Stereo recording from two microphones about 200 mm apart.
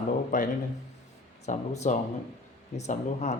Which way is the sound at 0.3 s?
40° left (ahead or behind).